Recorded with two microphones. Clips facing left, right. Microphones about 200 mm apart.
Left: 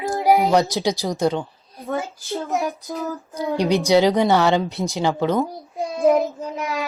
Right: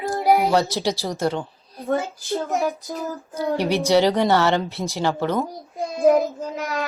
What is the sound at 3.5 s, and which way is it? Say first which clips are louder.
A child's voice: left 2 dB; 15° left (ahead or behind).